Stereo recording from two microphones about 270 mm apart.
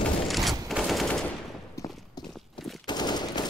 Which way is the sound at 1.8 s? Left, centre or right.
Centre.